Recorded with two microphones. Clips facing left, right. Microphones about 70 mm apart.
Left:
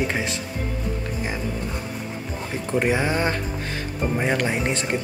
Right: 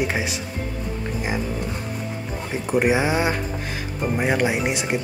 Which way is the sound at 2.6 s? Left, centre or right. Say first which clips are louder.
Right 2 dB; centre.